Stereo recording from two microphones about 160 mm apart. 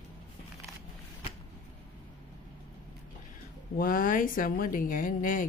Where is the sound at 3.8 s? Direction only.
60° left (ahead or behind).